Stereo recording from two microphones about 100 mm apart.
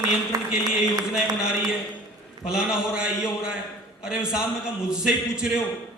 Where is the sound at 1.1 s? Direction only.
10° right (ahead or behind).